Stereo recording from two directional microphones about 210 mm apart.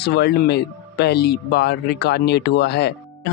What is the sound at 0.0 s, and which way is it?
Speech, 50° left (ahead or behind).